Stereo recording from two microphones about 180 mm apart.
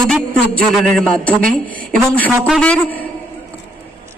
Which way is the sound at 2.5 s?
5° left (ahead or behind).